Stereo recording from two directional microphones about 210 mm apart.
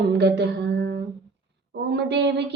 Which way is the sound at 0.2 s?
55° right (ahead or behind).